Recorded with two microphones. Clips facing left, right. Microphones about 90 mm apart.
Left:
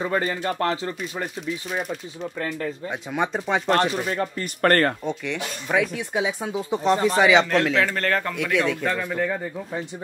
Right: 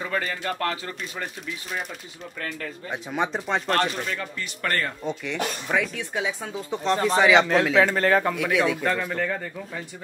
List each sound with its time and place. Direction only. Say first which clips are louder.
0.0 s speech: left 4 dB; 25° left (ahead or behind)
1.1 s a man's voice: left 5 dB; 5° left (ahead or behind)
2.3 s speech: left 4 dB; 20° left (ahead or behind)
2.9 s a man's voice: right 1 dB; centre (ahead or behind)
4.1 s speech: left 5 dB; 35° left (ahead or behind)
4.6 s speech: left 8 dB; 55° left (ahead or behind)
5.0 s a man's voice: left 2 dB; 5° right (ahead or behind)
5.7 s speech: left 6 dB; 10° left (ahead or behind)
7.1 s a man's voice: right 1 dB; centre (ahead or behind)